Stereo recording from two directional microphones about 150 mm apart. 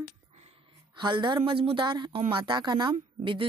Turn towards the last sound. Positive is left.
turn(degrees=-35)  # may be behind; listen again after turning